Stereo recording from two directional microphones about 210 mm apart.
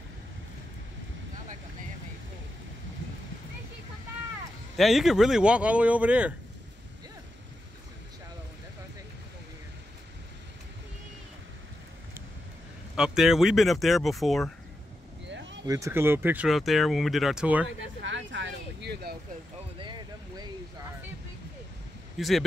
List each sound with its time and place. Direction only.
4.7 s speech: centre (ahead or behind)
12.9 s speech: 5° right (ahead or behind)
15.2 s a sound: 55° right (ahead or behind)
15.6 s speech: 15° right (ahead or behind)
18.0 s speech: 60° right (ahead or behind)
19.8 s a sound: 20° right (ahead or behind)
22.2 s speech: centre (ahead or behind)